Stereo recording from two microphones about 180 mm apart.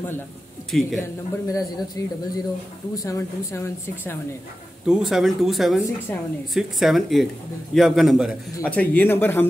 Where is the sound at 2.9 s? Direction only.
20° left (ahead or behind).